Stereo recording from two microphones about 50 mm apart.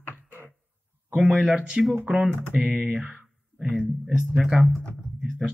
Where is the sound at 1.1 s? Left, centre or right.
Right.